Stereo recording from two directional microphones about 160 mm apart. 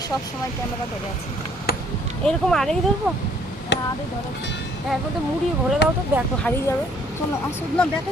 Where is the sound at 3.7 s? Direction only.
90° left.